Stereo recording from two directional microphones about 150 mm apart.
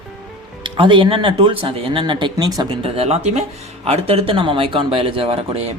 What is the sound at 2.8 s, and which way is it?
Speech, 40° right (ahead or behind).